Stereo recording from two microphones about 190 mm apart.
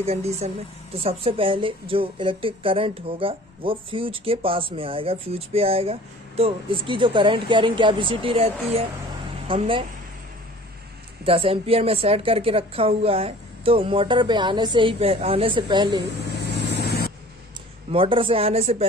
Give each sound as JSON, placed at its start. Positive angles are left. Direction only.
{"t": 0.0, "sound": "speech", "side_deg": -35}
{"t": 11.2, "sound": "speech", "side_deg": -30}
{"t": 16.3, "sound": "vehicle", "side_deg": 60}
{"t": 17.9, "sound": "speech", "side_deg": -30}